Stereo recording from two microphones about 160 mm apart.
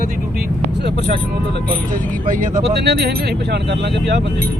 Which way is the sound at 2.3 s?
55° right (ahead or behind).